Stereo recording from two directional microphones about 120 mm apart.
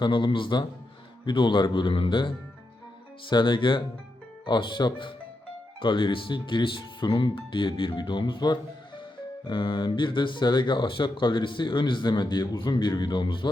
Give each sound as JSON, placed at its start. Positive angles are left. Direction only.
{"t": 0.0, "sound": "speech", "side_deg": 40}